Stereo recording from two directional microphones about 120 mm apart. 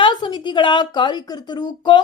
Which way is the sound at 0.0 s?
40° left (ahead or behind).